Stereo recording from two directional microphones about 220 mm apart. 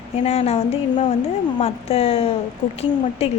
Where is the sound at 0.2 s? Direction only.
30° left (ahead or behind).